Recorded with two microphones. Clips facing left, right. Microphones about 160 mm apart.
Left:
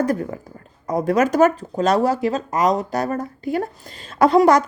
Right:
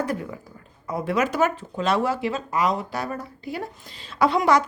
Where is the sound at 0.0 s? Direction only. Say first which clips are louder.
Left 6 dB; 40° left (ahead or behind).